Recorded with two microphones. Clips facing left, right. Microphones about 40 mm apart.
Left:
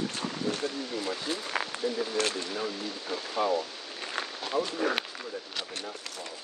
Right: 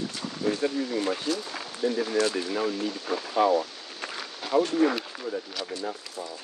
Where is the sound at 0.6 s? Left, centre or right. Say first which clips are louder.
Right 6 dB; right.